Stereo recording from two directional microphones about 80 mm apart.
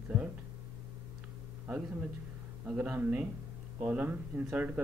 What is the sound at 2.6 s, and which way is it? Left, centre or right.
A man's voice, right.